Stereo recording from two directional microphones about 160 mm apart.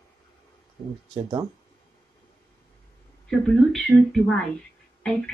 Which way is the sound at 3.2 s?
Centre (ahead or behind).